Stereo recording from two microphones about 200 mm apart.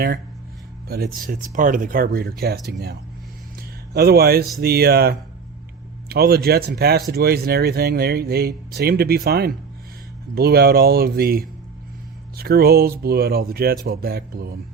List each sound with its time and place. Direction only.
0.9 s speech: 50° right (ahead or behind)
3.9 s speech: 50° right (ahead or behind)